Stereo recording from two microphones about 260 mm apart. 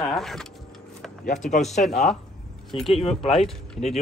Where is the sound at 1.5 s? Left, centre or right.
Left.